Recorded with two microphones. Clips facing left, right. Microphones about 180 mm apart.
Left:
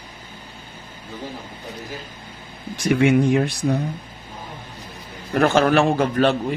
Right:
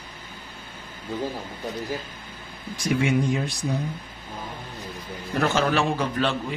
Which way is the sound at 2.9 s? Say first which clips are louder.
Left 6 dB; 60° left (ahead or behind).